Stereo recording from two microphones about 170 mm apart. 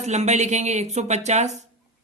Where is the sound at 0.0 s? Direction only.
40° right (ahead or behind).